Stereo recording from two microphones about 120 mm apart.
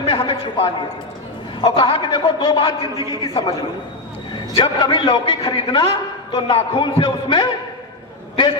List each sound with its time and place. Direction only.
0.0 s a sound: 45° left (ahead or behind)
1.6 s a man's voice: 45° left (ahead or behind)
3.0 s a man's voice: 30° right (ahead or behind)
3.2 s a man's voice: 35° left (ahead or behind)